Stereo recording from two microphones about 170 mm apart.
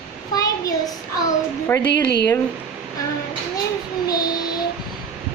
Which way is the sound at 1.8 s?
80° left.